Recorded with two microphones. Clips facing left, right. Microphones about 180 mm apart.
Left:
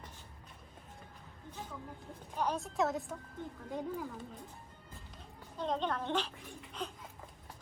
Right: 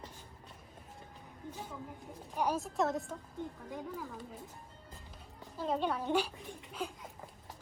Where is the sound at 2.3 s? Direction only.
10° right (ahead or behind).